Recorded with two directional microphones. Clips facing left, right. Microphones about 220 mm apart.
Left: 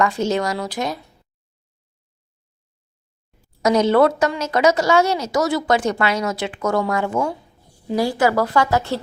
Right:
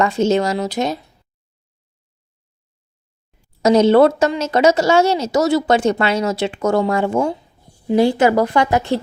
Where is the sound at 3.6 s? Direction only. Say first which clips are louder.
Right 4 dB; 25° right (ahead or behind).